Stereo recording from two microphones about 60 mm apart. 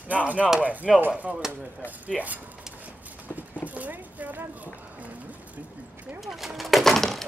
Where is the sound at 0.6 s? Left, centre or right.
Right.